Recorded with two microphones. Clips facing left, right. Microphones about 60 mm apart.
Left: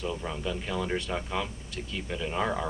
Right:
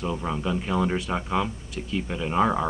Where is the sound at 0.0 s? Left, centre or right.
Centre.